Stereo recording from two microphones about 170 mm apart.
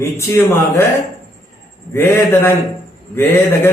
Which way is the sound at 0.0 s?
15° left (ahead or behind).